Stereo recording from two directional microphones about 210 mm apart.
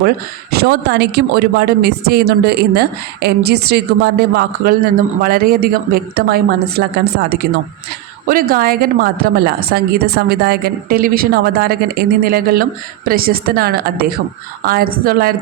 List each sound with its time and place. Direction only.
0.5 s a woman's voice: 50° right (ahead or behind)